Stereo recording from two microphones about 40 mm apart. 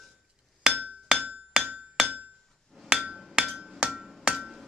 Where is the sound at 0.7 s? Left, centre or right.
Centre.